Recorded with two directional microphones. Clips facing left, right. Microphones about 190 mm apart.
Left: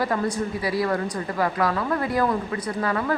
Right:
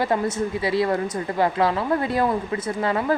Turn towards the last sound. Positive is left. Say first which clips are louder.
# right 2 dB
turn(degrees=-25)  # may be behind; listen again after turning